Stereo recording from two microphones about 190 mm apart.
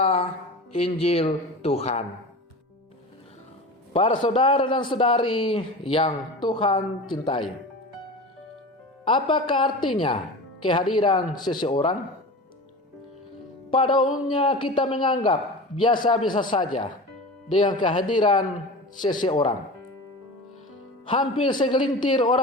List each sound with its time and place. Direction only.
0.0 s a sound: 35° left (ahead or behind)
0.7 s speech: 30° left (ahead or behind)
3.9 s a man's voice: 25° left (ahead or behind)
9.0 s a man's voice: 25° left (ahead or behind)
13.7 s music: 25° left (ahead or behind)
14.3 s a man's voice: 25° left (ahead or behind)
21.1 s a man's voice: 25° left (ahead or behind)